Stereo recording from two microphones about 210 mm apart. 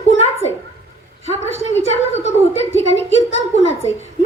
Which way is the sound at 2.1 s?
30° left (ahead or behind).